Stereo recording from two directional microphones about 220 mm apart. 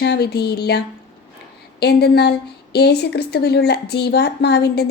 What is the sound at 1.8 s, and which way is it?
Speech, 50° left (ahead or behind).